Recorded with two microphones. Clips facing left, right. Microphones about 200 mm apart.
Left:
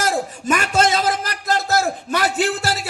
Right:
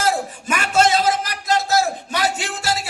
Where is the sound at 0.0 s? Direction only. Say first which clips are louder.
Even; 45° left (ahead or behind).